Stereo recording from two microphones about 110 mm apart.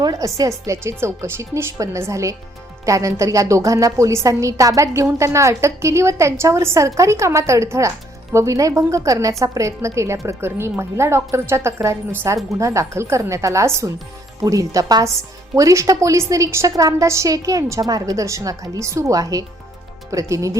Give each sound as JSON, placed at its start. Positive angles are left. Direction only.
{"t": 0.0, "sound": "a woman's voice", "side_deg": -30}